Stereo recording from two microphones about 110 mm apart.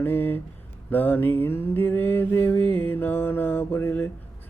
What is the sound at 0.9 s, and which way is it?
Mantra, 15° left (ahead or behind).